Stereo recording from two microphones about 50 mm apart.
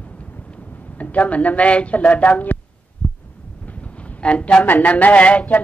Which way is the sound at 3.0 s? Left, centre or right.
Left.